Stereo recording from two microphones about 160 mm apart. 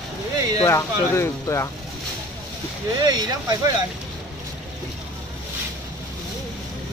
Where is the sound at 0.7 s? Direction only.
15° left (ahead or behind).